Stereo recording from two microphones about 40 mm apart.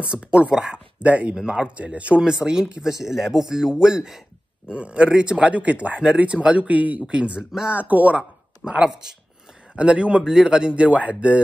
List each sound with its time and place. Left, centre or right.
0.0 s speech: right
1.0 s speech: right
1.3 s speech: centre
1.8 s speech: right
2.2 s speech: centre
4.7 s speech: right
7.1 s speech: right
7.7 s speech: right
8.2 s a sound: right
8.8 s speech: centre
9.8 s speech: right
10.2 s speech: centre